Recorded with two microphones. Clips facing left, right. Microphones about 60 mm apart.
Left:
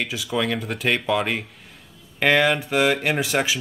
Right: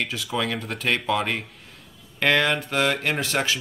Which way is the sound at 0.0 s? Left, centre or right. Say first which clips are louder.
Left 2 dB; centre.